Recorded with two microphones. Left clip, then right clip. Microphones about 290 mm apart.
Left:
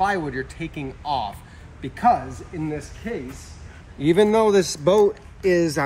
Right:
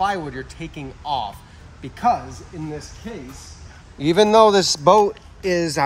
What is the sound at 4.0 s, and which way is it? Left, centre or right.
Speech, right.